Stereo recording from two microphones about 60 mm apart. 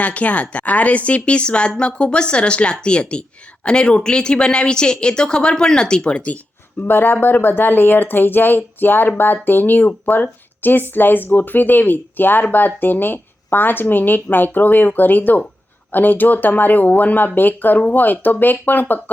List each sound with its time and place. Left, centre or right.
0.0 s a woman's voice: left
6.8 s speech: left